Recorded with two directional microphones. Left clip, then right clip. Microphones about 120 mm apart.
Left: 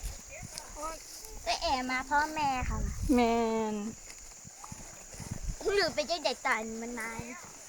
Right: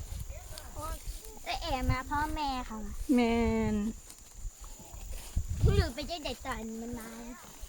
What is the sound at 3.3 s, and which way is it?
Speech, 20° right (ahead or behind).